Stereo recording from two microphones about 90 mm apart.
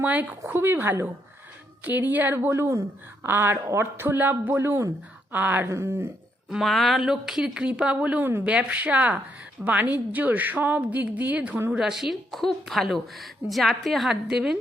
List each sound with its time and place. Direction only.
0.0 s speech: 20° right (ahead or behind)
6.5 s speech: centre (ahead or behind)
11.7 s a woman's voice: 5° right (ahead or behind)